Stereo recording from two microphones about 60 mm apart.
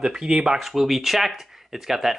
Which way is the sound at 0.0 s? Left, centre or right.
Centre.